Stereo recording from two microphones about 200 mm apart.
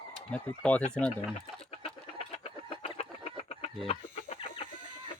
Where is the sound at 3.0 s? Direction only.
30° left (ahead or behind).